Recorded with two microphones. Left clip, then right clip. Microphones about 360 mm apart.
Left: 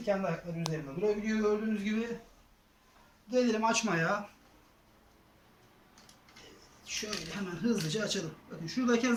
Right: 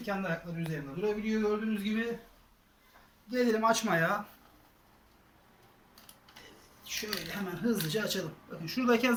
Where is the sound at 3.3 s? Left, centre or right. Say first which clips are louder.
Right 1 dB; centre.